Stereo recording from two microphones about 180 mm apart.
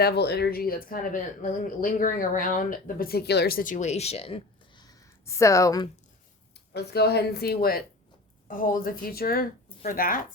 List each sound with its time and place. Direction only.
0.0 s speech: 65° left (ahead or behind); by 5.9 s 20° left (ahead or behind)
6.7 s a woman's voice: 65° left (ahead or behind)